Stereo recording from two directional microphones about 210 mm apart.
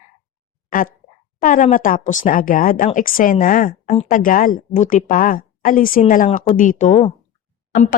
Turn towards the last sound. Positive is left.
turn(degrees=40)  # may be behind; listen again after turning